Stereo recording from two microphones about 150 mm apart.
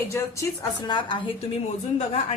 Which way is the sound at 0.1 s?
20° left (ahead or behind).